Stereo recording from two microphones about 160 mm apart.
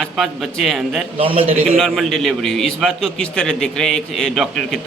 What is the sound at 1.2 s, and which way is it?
Speech, 35° right (ahead or behind).